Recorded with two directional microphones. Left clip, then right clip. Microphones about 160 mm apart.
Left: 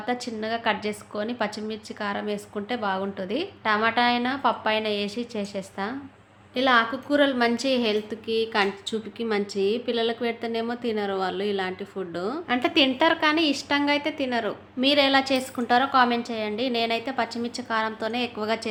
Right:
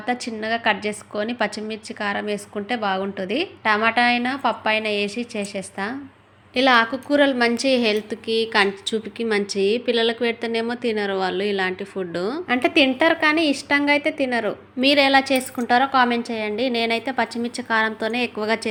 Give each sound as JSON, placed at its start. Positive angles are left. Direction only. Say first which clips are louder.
{"t": 0.0, "sound": "a woman's voice", "louder": "right 3 dB", "side_deg": -20}